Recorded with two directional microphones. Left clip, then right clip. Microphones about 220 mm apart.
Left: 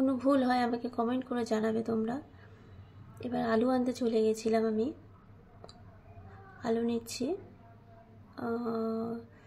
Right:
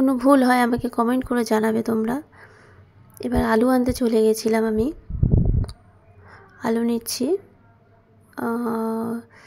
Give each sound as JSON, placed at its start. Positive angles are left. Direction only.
{"t": 0.0, "sound": "speech", "side_deg": -45}
{"t": 6.6, "sound": "speech", "side_deg": -45}
{"t": 8.4, "sound": "speech", "side_deg": -45}